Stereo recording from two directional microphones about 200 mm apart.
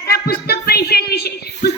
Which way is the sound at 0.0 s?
50° left (ahead or behind).